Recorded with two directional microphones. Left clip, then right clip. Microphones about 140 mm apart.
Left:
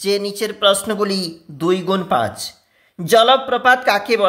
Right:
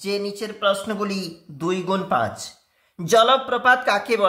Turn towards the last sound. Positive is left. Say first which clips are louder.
# left 4 dB
turn(degrees=20)  # may be behind; listen again after turning